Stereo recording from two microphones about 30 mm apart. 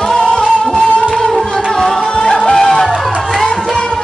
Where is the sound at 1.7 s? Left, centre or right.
Centre.